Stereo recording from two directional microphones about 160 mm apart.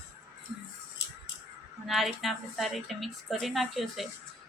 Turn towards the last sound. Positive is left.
turn(degrees=0)  # may be behind; listen again after turning